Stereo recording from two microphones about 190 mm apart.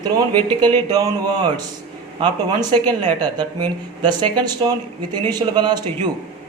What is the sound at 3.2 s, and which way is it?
Speech, 20° right (ahead or behind).